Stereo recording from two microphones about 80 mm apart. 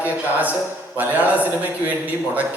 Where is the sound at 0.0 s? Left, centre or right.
Centre.